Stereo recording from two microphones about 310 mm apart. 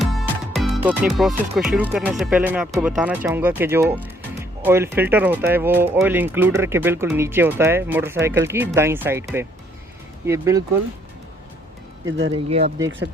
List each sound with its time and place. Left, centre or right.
0.0 s music: centre
1.5 s speech: centre
12.3 s speech: centre